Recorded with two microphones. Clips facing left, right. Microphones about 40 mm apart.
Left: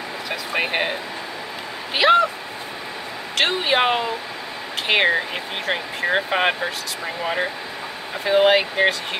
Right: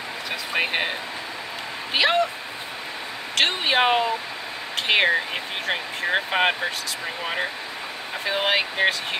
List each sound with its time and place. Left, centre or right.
0.3 s a sound: centre
2.0 s speech: centre
3.3 s speech: centre
8.3 s speech: centre